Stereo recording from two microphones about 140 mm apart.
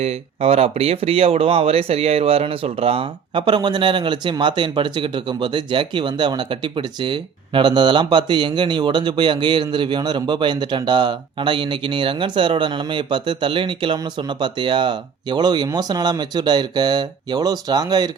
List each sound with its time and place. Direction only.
0.0 s speech: 45° right (ahead or behind); by 18.1 s 30° right (ahead or behind)